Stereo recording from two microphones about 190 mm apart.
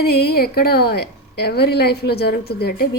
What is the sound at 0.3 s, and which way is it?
A woman's voice, 55° left (ahead or behind).